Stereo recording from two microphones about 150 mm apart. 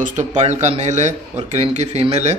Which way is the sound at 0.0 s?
55° right (ahead or behind).